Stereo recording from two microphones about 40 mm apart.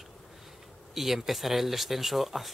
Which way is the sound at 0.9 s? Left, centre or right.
Centre.